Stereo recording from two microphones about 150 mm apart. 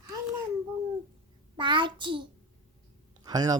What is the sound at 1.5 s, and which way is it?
Child singing, 30° right (ahead or behind).